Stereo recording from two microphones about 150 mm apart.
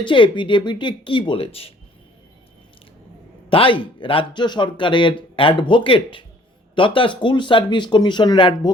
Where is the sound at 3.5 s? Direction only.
35° left (ahead or behind).